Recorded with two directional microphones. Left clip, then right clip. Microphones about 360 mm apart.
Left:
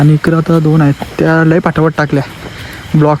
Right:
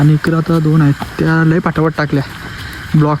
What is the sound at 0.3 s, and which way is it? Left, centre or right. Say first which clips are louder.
Speech: left 4 dB; left.